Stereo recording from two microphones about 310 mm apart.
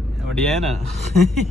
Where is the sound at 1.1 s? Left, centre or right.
Right.